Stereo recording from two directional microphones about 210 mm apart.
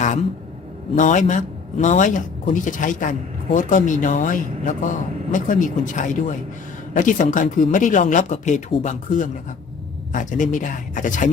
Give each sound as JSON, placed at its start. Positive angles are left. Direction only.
{"t": 0.9, "sound": "speech", "side_deg": 35}